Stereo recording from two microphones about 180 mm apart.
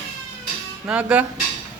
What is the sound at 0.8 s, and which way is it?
Speech, 5° right (ahead or behind).